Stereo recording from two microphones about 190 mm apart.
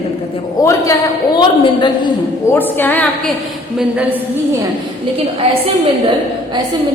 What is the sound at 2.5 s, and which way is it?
Speech, 10° left (ahead or behind).